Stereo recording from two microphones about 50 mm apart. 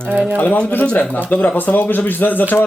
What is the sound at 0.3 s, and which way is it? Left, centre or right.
Speech, left.